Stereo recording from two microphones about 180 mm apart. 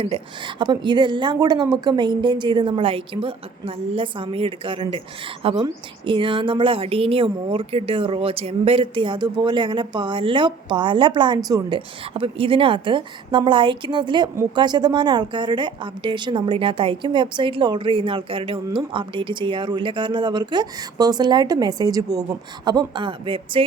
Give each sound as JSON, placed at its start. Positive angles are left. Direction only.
{"t": 0.0, "sound": "a woman's voice", "side_deg": -30}